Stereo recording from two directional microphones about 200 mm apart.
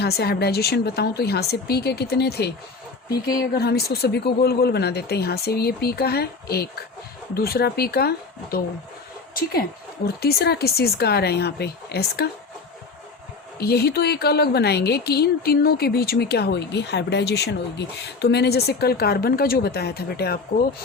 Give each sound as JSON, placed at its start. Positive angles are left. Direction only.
{"t": 0.0, "sound": "a woman's voice", "side_deg": 55}
{"t": 13.6, "sound": "a woman's voice", "side_deg": 50}